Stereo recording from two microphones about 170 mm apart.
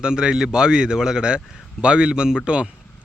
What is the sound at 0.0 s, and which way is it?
Speech, 5° right (ahead or behind).